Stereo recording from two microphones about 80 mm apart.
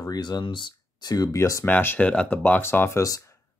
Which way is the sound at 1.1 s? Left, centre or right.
Left.